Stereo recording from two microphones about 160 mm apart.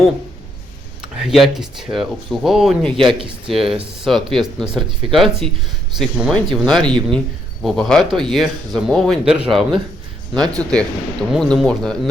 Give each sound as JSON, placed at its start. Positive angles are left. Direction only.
{"t": 1.2, "sound": "speech", "side_deg": 0}
{"t": 3.2, "sound": "speech", "side_deg": -30}
{"t": 4.0, "sound": "speech", "side_deg": 0}
{"t": 10.3, "sound": "speech", "side_deg": -25}
{"t": 10.6, "sound": "speech", "side_deg": 5}